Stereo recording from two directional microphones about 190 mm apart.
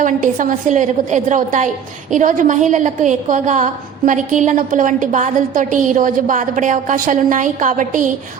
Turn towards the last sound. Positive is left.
turn(degrees=-40)  # may be behind; listen again after turning